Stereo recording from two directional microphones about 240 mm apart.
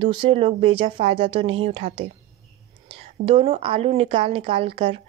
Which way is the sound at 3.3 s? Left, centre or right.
Right.